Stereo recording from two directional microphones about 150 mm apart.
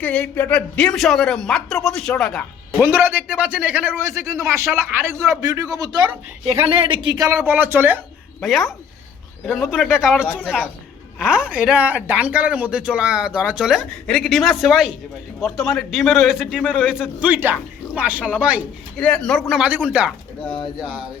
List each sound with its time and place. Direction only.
0.0 s a man's voice: 10° left (ahead or behind)
2.8 s speech: 15° right (ahead or behind)
6.5 s speech: 35° right (ahead or behind)
7.4 s speech: 15° right (ahead or behind)
8.4 s a man's voice: centre (ahead or behind)
18.9 s a man's voice: 5° left (ahead or behind)